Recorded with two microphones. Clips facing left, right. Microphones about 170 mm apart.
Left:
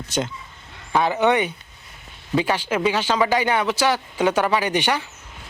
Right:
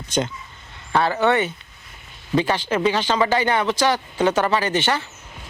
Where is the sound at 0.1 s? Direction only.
5° left (ahead or behind).